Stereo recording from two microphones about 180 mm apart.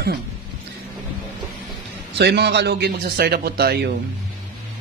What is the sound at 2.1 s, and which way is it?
A man's voice, 70° right (ahead or behind).